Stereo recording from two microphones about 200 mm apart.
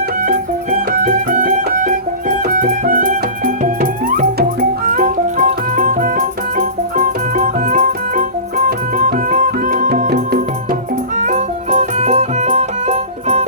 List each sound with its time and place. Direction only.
0.3 s music: 45° right (ahead or behind)
11.2 s music: 35° right (ahead or behind)